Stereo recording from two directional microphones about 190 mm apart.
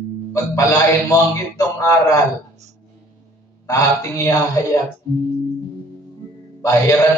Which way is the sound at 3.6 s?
15° left (ahead or behind).